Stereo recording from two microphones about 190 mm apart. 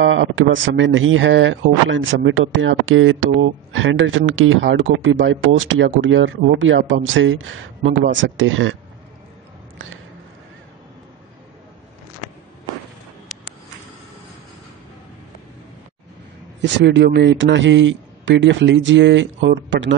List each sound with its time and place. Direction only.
0.0 s speech: 80° right
16.6 s a man's voice: 65° right (ahead or behind)